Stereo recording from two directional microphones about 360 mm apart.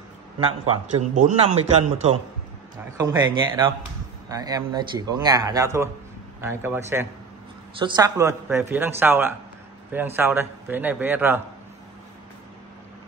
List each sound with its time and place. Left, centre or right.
0.4 s a man's voice: centre
3.0 s a man's voice: centre